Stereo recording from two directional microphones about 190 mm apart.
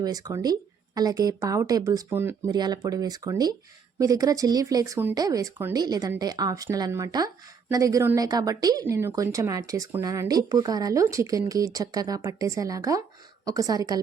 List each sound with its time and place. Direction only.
0.0 s a woman's voice: 20° right (ahead or behind)